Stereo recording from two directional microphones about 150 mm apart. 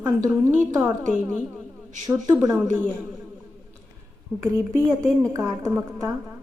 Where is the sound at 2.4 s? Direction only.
15° right (ahead or behind).